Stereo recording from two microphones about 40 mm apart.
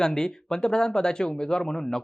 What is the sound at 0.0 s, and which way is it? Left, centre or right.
Speech, centre.